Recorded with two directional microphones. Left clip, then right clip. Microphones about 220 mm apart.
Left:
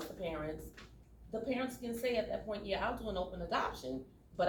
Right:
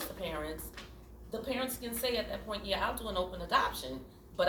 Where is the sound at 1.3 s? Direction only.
40° right (ahead or behind).